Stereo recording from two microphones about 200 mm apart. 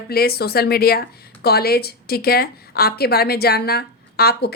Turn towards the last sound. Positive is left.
turn(degrees=50)  # may be behind; listen again after turning